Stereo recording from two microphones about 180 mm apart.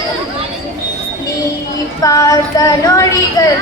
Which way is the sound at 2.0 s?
20° left (ahead or behind).